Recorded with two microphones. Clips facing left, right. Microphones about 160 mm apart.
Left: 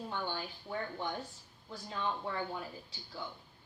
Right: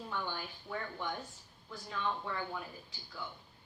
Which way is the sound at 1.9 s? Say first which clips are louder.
Left 1 dB; 30° left (ahead or behind).